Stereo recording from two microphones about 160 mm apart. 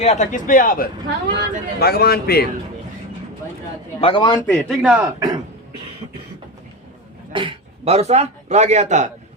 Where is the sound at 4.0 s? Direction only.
30° left (ahead or behind).